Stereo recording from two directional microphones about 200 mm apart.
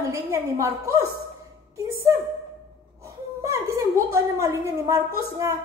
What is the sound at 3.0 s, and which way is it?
A woman's voice, 15° right (ahead or behind).